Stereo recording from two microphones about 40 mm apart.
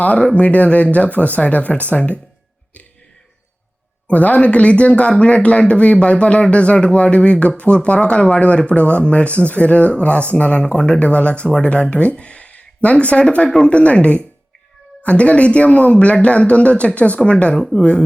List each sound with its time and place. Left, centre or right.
0.3 s speech: left
4.1 s speech: left